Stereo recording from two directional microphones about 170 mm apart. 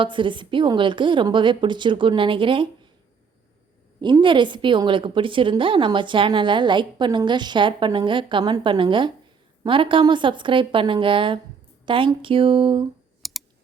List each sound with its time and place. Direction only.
0.0 s a woman's voice: 30° right (ahead or behind)
4.0 s a woman's voice: 30° right (ahead or behind)
13.2 s typing: centre (ahead or behind)